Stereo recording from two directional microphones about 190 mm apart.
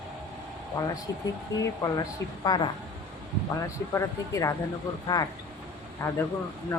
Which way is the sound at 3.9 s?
15° left (ahead or behind).